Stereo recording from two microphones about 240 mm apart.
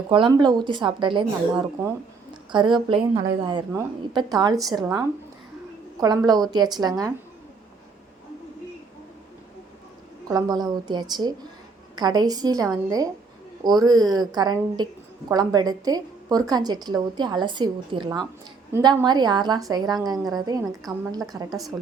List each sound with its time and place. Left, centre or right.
0.1 s a woman's voice: centre
10.2 s a woman's voice: centre